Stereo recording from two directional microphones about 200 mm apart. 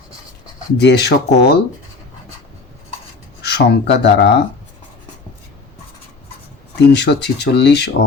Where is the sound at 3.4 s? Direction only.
55° left (ahead or behind).